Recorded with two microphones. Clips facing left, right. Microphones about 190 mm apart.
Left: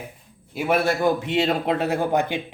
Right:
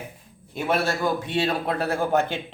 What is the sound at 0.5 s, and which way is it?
Speech, 10° left (ahead or behind).